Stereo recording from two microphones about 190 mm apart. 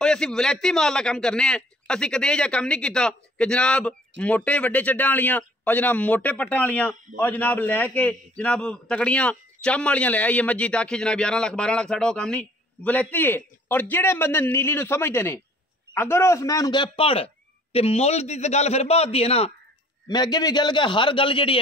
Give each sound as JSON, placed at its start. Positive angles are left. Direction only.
{"t": 0.0, "sound": "a man's voice", "side_deg": 5}
{"t": 20.1, "sound": "a man's voice", "side_deg": 20}